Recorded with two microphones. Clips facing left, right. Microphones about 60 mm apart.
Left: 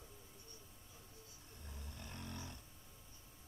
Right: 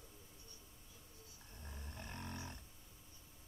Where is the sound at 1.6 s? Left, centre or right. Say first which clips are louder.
Right 2 dB; right.